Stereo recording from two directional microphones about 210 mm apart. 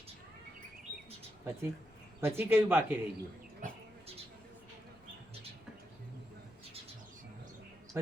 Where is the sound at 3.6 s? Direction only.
35° right (ahead or behind).